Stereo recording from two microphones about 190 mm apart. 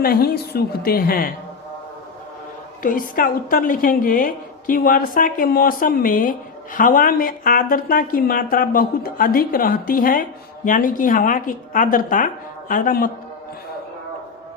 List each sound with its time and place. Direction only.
0.0 s a woman's voice: 50° left (ahead or behind)
2.8 s a woman's voice: 45° left (ahead or behind)